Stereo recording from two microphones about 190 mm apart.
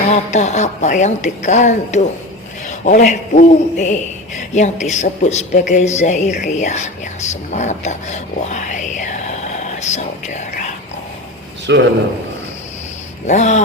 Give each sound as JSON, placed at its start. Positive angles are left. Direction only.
{"t": 0.1, "sound": "speech", "side_deg": 35}
{"t": 11.6, "sound": "a man's voice", "side_deg": -70}
{"t": 13.2, "sound": "speech", "side_deg": 40}